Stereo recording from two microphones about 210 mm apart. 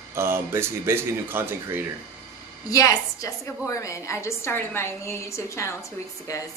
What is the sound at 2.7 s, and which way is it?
A woman's voice, 15° left (ahead or behind).